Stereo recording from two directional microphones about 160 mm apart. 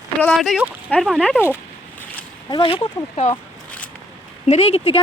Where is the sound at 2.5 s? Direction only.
35° left (ahead or behind).